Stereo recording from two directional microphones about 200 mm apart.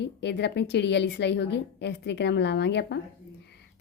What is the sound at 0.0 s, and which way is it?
Speech, 60° left (ahead or behind).